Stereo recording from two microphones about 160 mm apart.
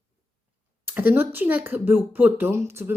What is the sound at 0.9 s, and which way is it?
Speech, 10° right (ahead or behind).